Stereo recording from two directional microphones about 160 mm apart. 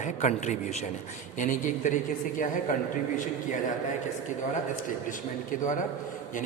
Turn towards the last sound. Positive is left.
turn(degrees=55)  # may be behind; listen again after turning